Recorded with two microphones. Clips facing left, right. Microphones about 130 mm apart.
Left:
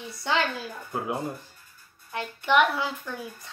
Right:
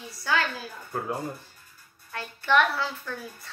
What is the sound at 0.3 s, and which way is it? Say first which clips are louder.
Speech: left 1 dB; 20° left (ahead or behind).